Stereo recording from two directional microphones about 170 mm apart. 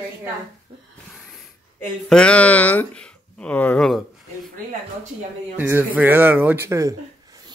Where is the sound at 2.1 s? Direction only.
5° left (ahead or behind).